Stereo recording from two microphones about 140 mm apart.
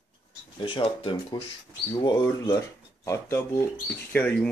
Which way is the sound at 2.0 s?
25° left (ahead or behind).